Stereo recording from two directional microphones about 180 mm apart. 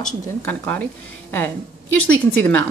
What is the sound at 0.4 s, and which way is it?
Speech, 10° left (ahead or behind).